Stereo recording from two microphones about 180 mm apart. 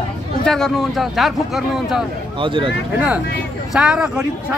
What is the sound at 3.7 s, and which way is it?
Speech, 5° right (ahead or behind).